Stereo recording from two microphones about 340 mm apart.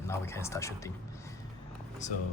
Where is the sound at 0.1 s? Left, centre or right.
Centre.